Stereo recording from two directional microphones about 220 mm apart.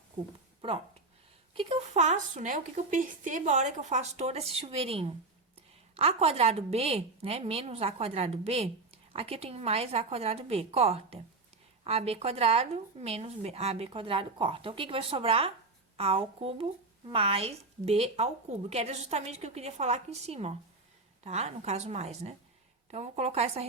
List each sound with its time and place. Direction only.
1.5 s a woman's voice: 25° right (ahead or behind)